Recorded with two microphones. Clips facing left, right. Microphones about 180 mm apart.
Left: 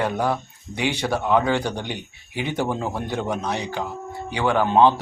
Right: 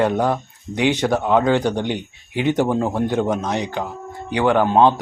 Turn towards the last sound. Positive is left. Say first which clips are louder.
# right 2 dB
turn(degrees=-15)  # may be behind; listen again after turning